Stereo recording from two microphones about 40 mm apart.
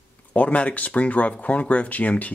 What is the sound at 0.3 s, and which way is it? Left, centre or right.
Speech, left.